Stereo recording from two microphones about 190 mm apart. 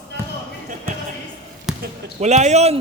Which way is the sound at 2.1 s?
35° right (ahead or behind).